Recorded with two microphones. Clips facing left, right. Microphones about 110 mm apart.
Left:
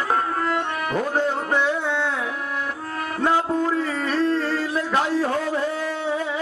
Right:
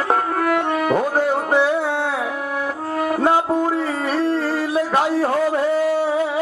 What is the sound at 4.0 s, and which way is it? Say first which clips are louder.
Music: right 1 dB; 15° right (ahead or behind).